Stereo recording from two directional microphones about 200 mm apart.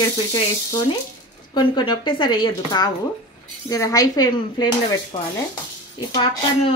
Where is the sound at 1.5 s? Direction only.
25° left (ahead or behind).